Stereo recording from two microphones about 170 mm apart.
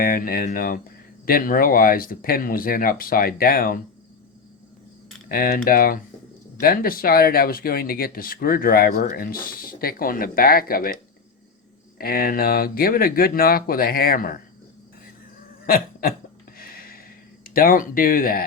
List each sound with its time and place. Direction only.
0.0 s speech: 60° left (ahead or behind)
5.3 s speech: 60° left (ahead or behind)
11.9 s speech: 60° left (ahead or behind)
15.6 s a sound: 60° left (ahead or behind)
17.4 s speech: 55° left (ahead or behind)